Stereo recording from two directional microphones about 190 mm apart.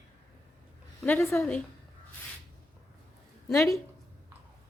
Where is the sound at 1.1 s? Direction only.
10° left (ahead or behind).